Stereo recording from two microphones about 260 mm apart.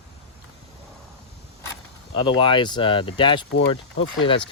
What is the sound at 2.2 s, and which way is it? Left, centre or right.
Speech, centre.